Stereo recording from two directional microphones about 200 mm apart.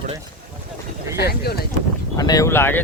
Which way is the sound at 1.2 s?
50° left (ahead or behind).